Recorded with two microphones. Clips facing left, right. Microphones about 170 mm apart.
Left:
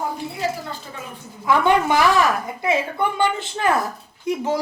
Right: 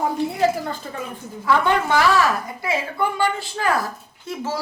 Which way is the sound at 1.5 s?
15° left (ahead or behind).